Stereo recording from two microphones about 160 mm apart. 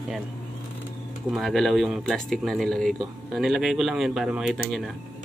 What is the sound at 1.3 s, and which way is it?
Speech, centre (ahead or behind).